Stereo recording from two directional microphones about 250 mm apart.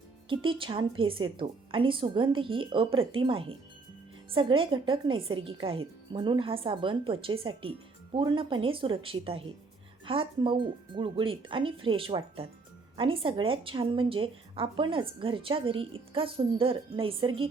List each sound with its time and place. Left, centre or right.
0.3 s a woman's voice: centre